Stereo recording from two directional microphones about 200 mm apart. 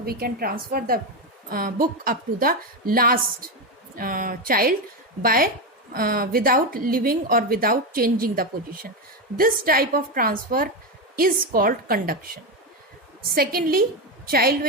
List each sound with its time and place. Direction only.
0.0 s a woman's voice: 50° right (ahead or behind)